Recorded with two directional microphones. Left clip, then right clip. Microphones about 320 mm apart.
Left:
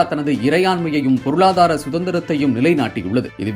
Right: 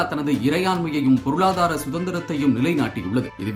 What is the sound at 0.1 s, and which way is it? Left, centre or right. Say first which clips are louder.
Speech: left 5 dB; centre.